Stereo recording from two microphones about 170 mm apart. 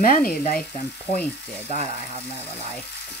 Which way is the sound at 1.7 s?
50° left (ahead or behind).